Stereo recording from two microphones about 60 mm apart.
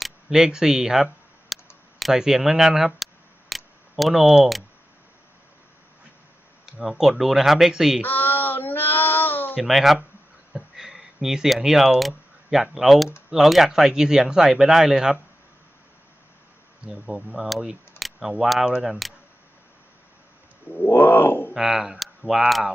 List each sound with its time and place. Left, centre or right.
0.0 s speech: centre
1.5 s a sound: centre
2.0 s speech: centre
3.5 s tick: centre
6.7 s speech: centre
8.0 s child singing: left
9.6 s speech: centre
10.5 s a sound: centre
12.7 s speech: centre
16.8 s speech: centre
20.7 s a sound: left
21.5 s speech: centre